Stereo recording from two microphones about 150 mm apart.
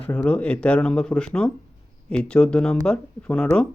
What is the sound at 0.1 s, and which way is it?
Speech, 10° left (ahead or behind).